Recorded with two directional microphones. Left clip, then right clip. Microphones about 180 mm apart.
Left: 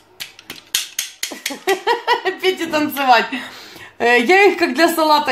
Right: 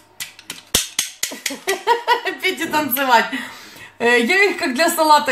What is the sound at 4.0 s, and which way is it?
Speech, 40° left (ahead or behind).